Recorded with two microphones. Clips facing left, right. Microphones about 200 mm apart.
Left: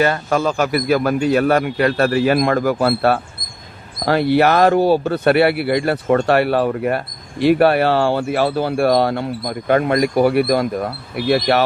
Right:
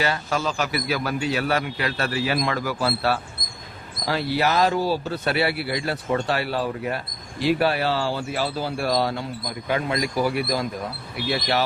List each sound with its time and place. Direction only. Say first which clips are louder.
0.0 s a man's voice: left 8 dB; 50° left (ahead or behind)